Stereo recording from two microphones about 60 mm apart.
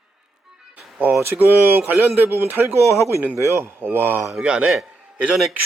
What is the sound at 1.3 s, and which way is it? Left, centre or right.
Speech, right.